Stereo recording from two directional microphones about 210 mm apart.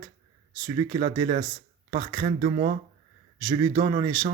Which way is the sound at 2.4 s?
35° right (ahead or behind).